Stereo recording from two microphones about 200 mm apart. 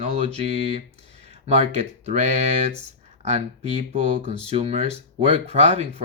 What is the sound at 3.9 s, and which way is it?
Speech, 30° right (ahead or behind).